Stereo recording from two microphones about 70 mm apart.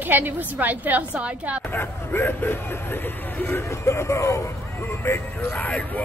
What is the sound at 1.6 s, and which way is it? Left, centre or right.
Speech, left.